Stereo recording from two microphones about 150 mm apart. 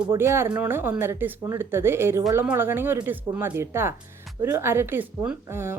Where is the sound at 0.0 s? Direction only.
15° right (ahead or behind).